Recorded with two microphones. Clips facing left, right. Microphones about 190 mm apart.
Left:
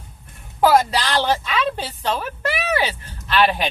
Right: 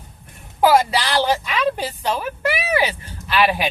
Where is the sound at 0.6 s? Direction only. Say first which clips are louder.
Even; 10° right (ahead or behind).